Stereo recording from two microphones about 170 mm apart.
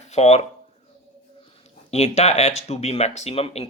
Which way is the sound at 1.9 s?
40° left (ahead or behind).